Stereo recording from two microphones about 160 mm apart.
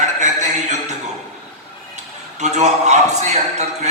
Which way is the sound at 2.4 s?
45° right (ahead or behind).